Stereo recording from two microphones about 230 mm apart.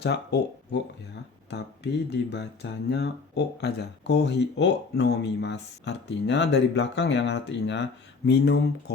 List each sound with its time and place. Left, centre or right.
0.0 s speech: left